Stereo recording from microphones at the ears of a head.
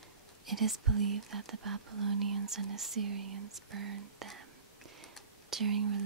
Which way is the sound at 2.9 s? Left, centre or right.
Right.